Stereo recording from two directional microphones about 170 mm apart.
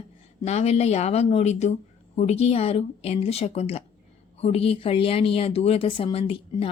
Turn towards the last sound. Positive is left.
turn(degrees=35)  # may be behind; listen again after turning